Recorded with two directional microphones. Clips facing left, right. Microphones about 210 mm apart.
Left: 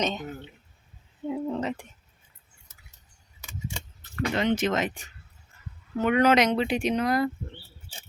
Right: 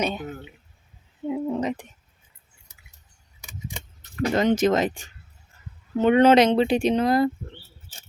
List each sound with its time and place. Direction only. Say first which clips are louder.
0.0 s speech: right 2 dB; 10° right (ahead or behind)
1.3 s a sound: right 3 dB; 15° right (ahead or behind)
3.4 s keys jangling: even; 15° right (ahead or behind)
4.2 s speech: right 5 dB; 40° right (ahead or behind)